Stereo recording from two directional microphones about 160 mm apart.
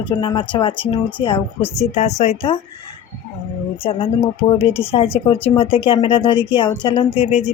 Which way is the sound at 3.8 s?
35° left (ahead or behind).